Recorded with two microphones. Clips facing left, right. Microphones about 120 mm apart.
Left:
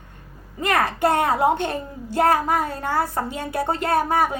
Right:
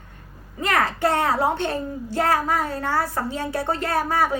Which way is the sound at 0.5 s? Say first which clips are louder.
Left 1 dB; 20° left (ahead or behind).